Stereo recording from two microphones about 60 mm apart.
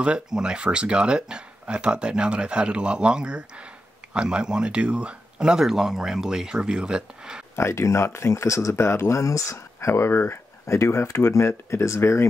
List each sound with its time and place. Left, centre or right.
0.0 s speech: centre
7.5 s speech: left